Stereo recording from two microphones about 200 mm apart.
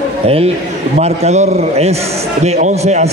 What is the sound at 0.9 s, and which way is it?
A man's voice, 35° right (ahead or behind).